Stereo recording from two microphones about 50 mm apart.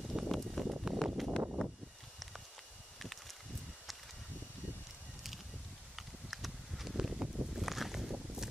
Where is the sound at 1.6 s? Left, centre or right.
Centre.